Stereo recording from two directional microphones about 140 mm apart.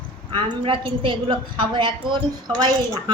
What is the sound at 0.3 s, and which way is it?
A woman's voice, 35° right (ahead or behind).